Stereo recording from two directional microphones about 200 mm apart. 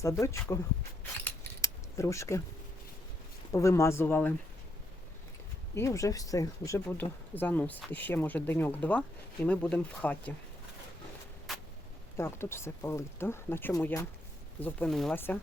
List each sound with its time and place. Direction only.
0.0 s speech: 15° left (ahead or behind)
1.2 s keys jangling: 15° left (ahead or behind)
3.5 s speech: 15° left (ahead or behind)
5.7 s speech: 15° left (ahead or behind)
11.5 s a sound: centre (ahead or behind)
12.1 s speech: 10° left (ahead or behind)